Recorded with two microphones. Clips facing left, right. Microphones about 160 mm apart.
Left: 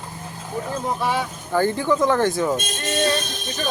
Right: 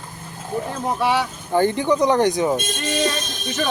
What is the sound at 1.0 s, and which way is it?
Speech, 70° right (ahead or behind).